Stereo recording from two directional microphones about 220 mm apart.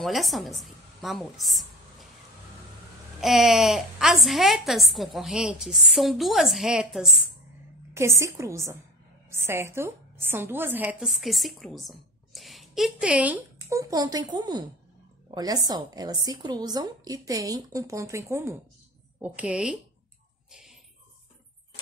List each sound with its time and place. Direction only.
0.0 s a woman's voice: centre (ahead or behind)
3.2 s a woman's voice: centre (ahead or behind)
7.9 s a woman's voice: 10° right (ahead or behind)